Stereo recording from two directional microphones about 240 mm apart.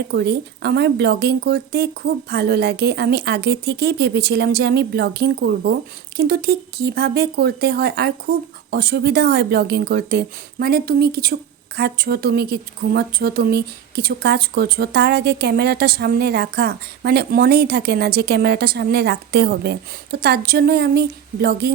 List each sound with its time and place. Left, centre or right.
0.1 s speech: right